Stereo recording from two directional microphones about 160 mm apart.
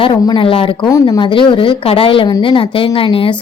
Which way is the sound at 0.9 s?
20° left (ahead or behind).